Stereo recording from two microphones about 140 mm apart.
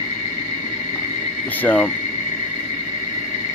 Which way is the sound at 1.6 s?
15° left (ahead or behind).